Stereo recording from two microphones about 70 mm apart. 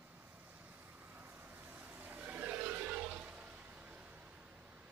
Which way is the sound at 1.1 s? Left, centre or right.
Right.